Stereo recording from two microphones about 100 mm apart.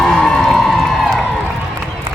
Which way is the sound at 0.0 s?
5° left (ahead or behind).